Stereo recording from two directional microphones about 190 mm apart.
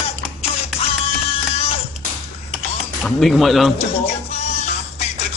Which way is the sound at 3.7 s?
35° left (ahead or behind).